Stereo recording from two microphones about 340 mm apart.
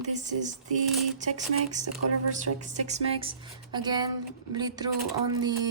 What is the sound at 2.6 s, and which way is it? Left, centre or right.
Speech, centre.